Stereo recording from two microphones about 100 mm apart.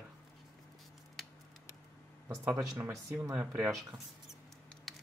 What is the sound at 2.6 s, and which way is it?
Speech, 30° right (ahead or behind).